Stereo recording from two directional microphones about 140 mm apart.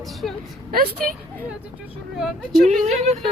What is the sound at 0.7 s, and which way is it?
Speech, 90° right.